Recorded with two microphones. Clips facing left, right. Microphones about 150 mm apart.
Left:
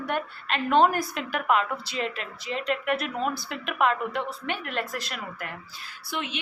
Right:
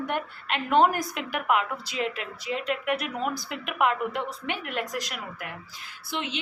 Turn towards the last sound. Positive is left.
turn(degrees=-25)  # may be behind; listen again after turning